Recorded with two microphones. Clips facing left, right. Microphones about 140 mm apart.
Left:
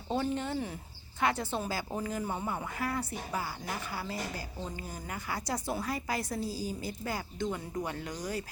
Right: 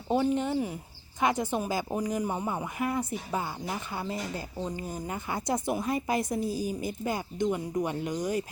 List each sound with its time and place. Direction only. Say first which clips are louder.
0.1 s speech: right 6 dB; 15° right (ahead or behind)